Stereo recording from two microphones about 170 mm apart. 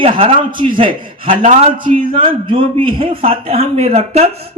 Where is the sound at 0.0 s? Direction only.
35° right (ahead or behind).